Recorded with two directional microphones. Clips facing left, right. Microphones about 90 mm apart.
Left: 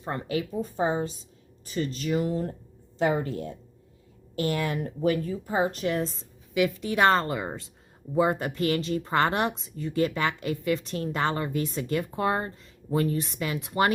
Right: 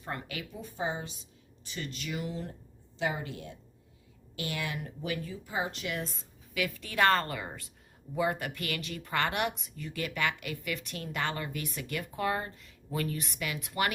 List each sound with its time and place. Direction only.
0.0 s speech: 30° left (ahead or behind)
6.5 s a woman's voice: 20° left (ahead or behind)